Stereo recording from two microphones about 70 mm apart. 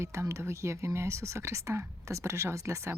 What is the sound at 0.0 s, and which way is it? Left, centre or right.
A woman's voice, right.